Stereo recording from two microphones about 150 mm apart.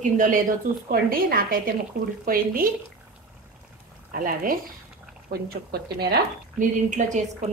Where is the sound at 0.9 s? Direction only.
75° right (ahead or behind).